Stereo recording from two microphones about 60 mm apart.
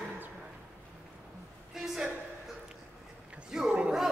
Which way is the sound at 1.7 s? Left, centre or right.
Centre.